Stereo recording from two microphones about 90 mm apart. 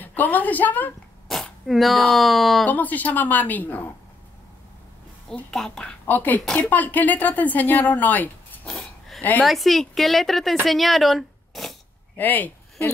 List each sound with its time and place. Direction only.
0.0 s a woman's voice: 20° left (ahead or behind)
1.3 s speech: centre (ahead or behind)
2.6 s speech: 20° left (ahead or behind)
5.5 s speech: 5° left (ahead or behind)
5.9 s speech: 20° left (ahead or behind)
8.6 s a sound: 5° left (ahead or behind)
9.4 s speech: centre (ahead or behind)
12.2 s speech: 20° left (ahead or behind)